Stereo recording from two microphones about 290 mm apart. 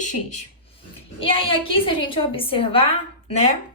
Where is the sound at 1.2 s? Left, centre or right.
Centre.